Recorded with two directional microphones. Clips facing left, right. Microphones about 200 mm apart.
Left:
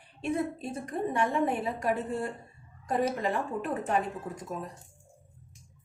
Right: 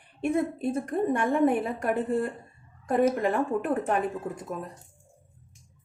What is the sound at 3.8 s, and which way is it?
Speech, 55° right (ahead or behind).